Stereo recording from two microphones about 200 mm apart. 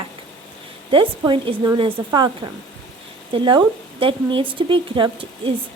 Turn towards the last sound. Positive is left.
turn(degrees=-25)  # may be behind; listen again after turning